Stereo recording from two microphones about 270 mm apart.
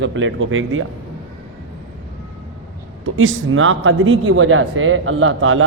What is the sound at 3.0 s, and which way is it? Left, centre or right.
A man's voice, right.